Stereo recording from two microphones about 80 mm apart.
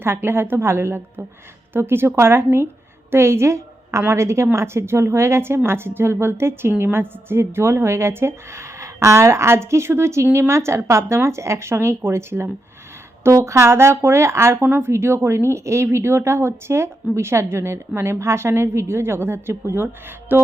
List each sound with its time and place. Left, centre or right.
0.0 s a woman's voice: right